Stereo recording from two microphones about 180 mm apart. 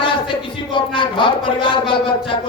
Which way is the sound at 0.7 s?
25° left (ahead or behind).